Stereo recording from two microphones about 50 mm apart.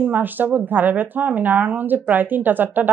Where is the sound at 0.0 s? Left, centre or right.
Right.